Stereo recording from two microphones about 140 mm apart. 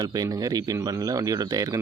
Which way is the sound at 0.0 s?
25° right (ahead or behind).